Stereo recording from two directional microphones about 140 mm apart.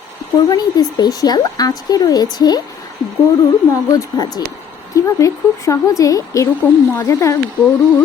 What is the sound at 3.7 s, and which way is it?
A woman's voice, 25° left (ahead or behind).